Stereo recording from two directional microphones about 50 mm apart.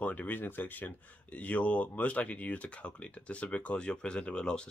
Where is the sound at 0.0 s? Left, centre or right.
Left.